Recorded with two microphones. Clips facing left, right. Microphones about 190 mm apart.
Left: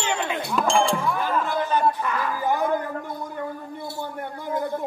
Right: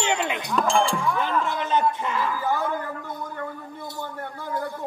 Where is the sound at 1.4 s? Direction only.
20° right (ahead or behind).